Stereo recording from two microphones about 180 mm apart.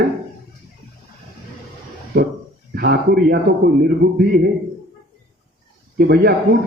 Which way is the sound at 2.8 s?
65° right (ahead or behind).